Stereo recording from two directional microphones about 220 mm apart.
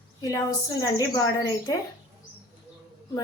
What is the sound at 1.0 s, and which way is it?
Speech, 15° left (ahead or behind).